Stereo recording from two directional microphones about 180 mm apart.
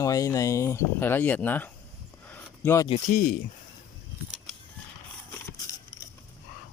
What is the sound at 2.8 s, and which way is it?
Speech, 40° left (ahead or behind).